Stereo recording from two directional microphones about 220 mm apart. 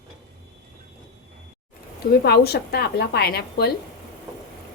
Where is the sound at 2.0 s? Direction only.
45° left (ahead or behind).